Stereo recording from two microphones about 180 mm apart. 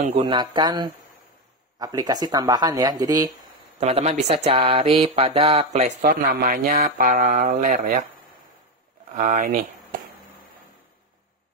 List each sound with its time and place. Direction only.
0.0 s speech: 35° right (ahead or behind)
3.7 s speech: 35° right (ahead or behind)
6.0 s speech: 55° right (ahead or behind)
9.1 s speech: 45° right (ahead or behind)